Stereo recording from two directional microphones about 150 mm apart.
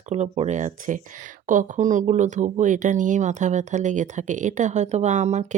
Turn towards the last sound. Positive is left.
turn(degrees=-50)  # may be behind; listen again after turning